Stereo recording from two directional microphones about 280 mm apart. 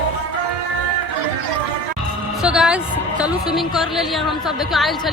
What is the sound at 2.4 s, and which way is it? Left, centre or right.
A woman's voice, centre.